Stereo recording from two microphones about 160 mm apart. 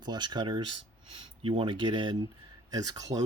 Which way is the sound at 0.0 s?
25° right (ahead or behind).